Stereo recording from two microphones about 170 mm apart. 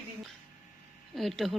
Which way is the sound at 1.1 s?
Centre (ahead or behind).